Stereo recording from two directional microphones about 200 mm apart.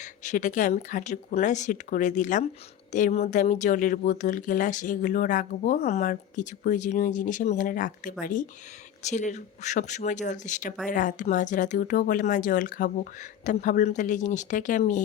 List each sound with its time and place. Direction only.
0.3 s speech: 40° left (ahead or behind)